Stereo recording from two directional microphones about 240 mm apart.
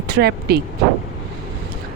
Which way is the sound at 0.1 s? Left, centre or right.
Right.